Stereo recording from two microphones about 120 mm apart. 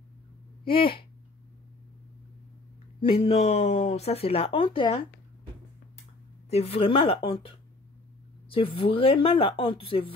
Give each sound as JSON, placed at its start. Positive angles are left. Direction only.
{"t": 0.7, "sound": "speech", "side_deg": 45}
{"t": 3.0, "sound": "speech", "side_deg": 50}
{"t": 6.5, "sound": "speech", "side_deg": 55}
{"t": 8.5, "sound": "speech", "side_deg": 50}